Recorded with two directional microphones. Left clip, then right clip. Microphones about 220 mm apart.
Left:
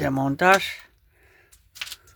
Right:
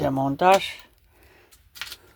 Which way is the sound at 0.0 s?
15° left (ahead or behind).